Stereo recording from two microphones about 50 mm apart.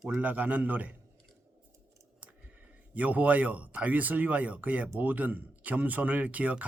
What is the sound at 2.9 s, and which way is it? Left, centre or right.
Speech, right.